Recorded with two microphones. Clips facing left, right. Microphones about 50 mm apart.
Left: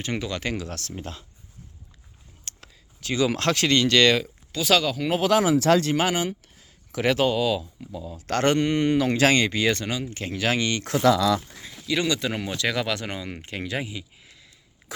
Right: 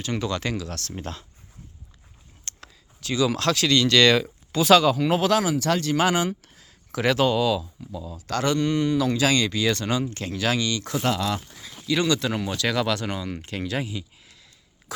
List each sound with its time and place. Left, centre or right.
0.2 s speech: centre
0.5 s speech: left
0.9 s speech: centre
3.0 s speech: left
3.8 s speech: centre
4.5 s speech: centre
5.5 s speech: left
6.0 s speech: centre
8.1 s speech: left
8.5 s speech: left
9.6 s speech: left
10.6 s speech: left
11.9 s speech: centre